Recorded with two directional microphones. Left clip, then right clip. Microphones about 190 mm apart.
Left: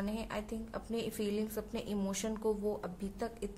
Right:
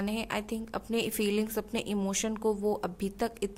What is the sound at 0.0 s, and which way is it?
A woman's voice, 45° right (ahead or behind).